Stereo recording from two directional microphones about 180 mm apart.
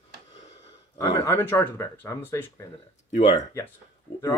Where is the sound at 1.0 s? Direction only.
15° left (ahead or behind).